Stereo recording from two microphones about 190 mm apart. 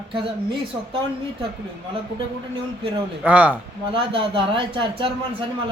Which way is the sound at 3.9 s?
30° right (ahead or behind).